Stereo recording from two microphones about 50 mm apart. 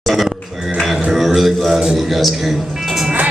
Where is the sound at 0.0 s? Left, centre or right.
Centre.